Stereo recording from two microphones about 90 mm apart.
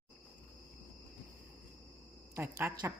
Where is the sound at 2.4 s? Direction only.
25° right (ahead or behind).